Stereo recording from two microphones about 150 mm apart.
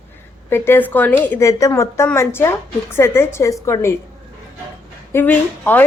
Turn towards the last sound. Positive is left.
turn(degrees=10)  # may be behind; listen again after turning